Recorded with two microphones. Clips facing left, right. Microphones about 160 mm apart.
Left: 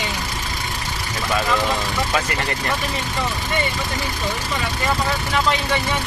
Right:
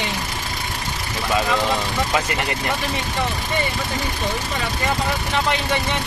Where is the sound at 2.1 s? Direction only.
20° right (ahead or behind).